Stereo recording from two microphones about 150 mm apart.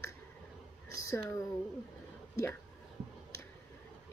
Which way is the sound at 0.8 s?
90° right.